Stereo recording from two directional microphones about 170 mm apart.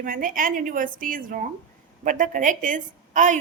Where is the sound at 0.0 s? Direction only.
55° right (ahead or behind).